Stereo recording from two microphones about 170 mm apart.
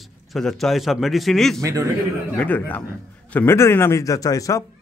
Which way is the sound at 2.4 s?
10° left (ahead or behind).